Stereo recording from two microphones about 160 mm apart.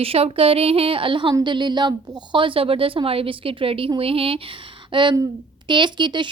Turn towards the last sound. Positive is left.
turn(degrees=-30)  # may be behind; listen again after turning